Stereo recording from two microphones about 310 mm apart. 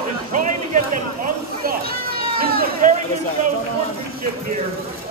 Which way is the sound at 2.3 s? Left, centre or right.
Right.